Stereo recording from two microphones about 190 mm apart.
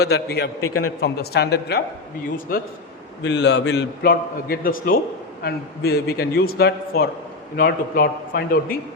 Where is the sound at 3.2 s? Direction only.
65° left (ahead or behind).